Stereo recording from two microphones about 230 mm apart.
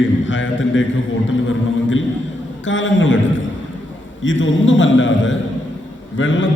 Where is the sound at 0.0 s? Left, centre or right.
Left.